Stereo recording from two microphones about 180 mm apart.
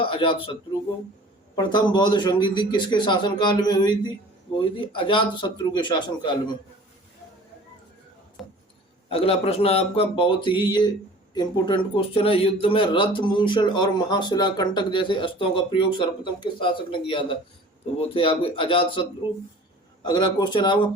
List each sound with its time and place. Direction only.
0.0 s speech: 30° left (ahead or behind)
1.5 s speech: 25° left (ahead or behind)
8.4 s a sound: centre (ahead or behind)
9.0 s speech: 35° left (ahead or behind)
20.1 s speech: 25° left (ahead or behind)